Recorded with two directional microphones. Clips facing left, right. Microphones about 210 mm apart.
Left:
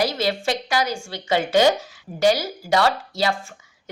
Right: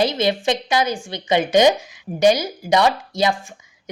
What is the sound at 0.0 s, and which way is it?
Speech, 20° right (ahead or behind).